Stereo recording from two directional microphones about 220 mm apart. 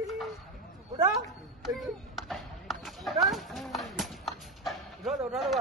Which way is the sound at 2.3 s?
Centre (ahead or behind).